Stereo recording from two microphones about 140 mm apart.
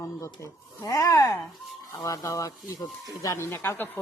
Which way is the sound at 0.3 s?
20° left (ahead or behind).